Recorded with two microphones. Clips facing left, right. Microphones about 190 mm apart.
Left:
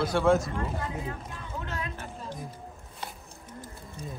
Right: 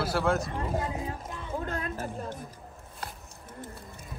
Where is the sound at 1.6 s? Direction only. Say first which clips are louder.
Right 1 dB; 50° right (ahead or behind).